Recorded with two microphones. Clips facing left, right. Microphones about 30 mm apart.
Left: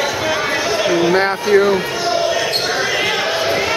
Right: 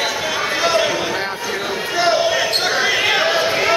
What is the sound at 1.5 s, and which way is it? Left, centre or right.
Speech, centre.